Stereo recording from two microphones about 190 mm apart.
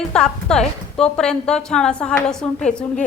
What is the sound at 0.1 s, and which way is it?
A woman's voice, 5° left (ahead or behind).